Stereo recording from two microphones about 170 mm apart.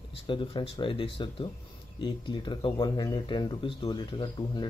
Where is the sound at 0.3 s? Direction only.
30° left (ahead or behind).